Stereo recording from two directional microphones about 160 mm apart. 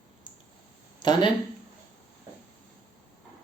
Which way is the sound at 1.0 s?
25° left (ahead or behind).